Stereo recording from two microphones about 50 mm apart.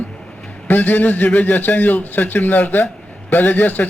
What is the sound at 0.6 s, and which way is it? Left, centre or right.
A man's voice, left.